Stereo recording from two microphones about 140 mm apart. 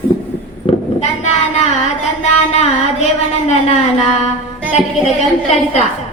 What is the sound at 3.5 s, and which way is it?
Speech, 55° left (ahead or behind).